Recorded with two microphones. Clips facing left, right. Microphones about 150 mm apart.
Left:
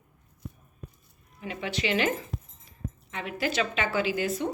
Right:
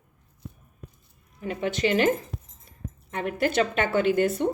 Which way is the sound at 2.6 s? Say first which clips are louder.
Left 1 dB; 50° right (ahead or behind).